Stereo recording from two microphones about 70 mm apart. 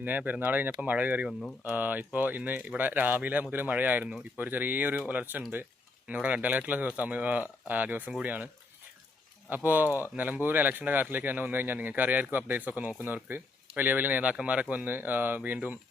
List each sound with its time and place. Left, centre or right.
0.0 s speech: right
9.5 s speech: right